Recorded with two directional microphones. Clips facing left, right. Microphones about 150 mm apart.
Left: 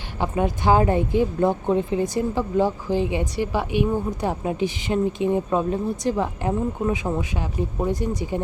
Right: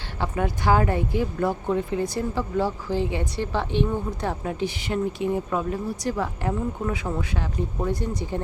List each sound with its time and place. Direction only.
0.2 s a woman's voice: 20° left (ahead or behind)